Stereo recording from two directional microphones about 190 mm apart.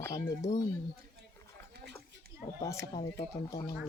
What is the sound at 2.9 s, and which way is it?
Speech, 25° left (ahead or behind).